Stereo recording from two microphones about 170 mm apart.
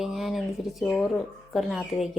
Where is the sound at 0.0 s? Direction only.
Centre (ahead or behind).